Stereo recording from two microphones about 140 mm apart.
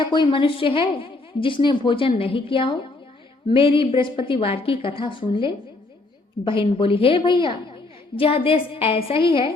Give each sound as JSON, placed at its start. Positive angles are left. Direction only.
{"t": 0.0, "sound": "a woman's voice", "side_deg": 35}